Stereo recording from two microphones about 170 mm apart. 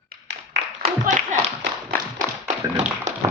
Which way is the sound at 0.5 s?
80° right.